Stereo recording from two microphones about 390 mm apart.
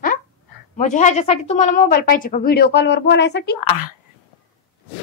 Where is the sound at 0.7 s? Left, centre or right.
Centre.